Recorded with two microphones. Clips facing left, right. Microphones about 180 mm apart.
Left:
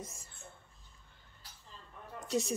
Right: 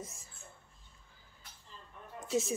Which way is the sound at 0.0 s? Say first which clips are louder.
Even; centre (ahead or behind).